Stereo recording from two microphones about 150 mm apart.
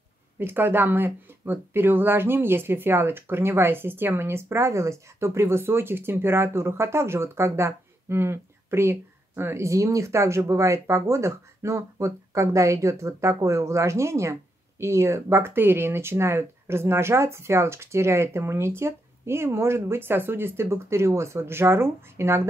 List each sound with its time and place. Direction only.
0.4 s speech: 15° right (ahead or behind)